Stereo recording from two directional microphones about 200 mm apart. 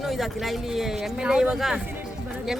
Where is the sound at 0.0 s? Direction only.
Centre (ahead or behind).